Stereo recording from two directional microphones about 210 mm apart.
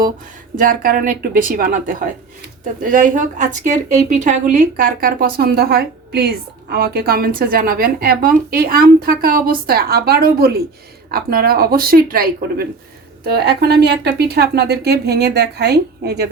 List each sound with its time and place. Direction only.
0.5 s a woman's voice: 40° right (ahead or behind)